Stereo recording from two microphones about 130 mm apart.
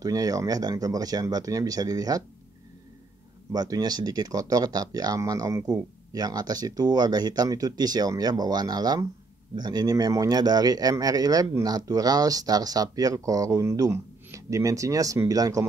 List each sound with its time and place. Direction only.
0.0 s speech: 30° right (ahead or behind)
3.5 s speech: 30° right (ahead or behind)